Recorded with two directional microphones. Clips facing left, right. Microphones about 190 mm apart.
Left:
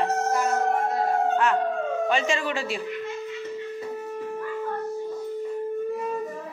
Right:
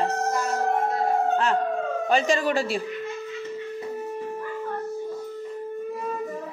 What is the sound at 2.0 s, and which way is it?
Speech, 40° right (ahead or behind).